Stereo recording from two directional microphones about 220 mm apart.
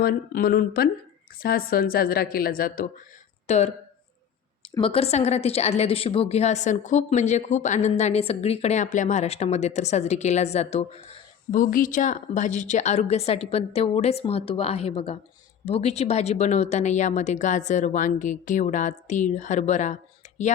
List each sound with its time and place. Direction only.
0.0 s speech: 45° left (ahead or behind)